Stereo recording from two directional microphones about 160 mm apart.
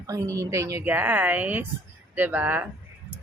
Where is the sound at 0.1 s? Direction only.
20° right (ahead or behind).